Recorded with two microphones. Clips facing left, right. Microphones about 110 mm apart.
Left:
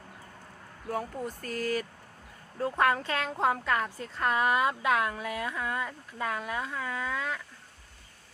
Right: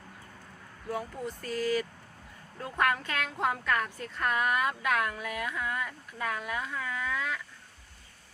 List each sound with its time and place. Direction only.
0.9 s speech: 45° left (ahead or behind)
2.6 s speech: 30° left (ahead or behind)